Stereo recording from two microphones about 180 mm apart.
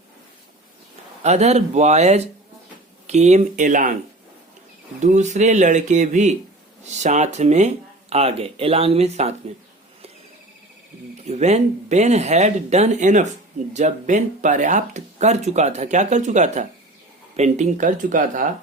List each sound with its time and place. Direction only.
1.2 s speech: 40° right (ahead or behind)
4.9 s speech: 40° right (ahead or behind)
11.3 s speech: 40° right (ahead or behind)